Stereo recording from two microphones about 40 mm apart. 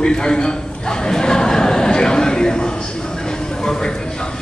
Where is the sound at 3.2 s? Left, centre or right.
Centre.